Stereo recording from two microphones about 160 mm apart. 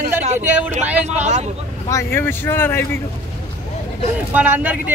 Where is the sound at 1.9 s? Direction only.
15° left (ahead or behind).